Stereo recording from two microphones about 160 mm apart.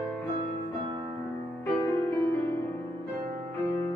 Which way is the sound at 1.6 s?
15° left (ahead or behind).